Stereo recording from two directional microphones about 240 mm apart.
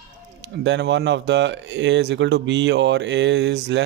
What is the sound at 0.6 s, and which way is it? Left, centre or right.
Speech, right.